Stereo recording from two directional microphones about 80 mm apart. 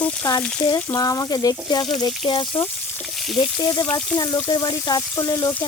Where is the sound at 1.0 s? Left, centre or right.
Left.